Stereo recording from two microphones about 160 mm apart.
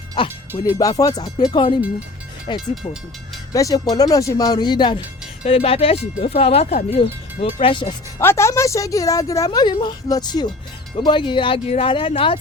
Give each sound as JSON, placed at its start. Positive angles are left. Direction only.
{"t": 0.2, "sound": "speech", "side_deg": 30}
{"t": 3.5, "sound": "speech", "side_deg": 20}
{"t": 5.4, "sound": "speech", "side_deg": 40}
{"t": 8.2, "sound": "speech", "side_deg": 15}